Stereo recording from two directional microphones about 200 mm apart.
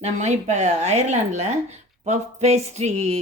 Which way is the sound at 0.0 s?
35° right (ahead or behind).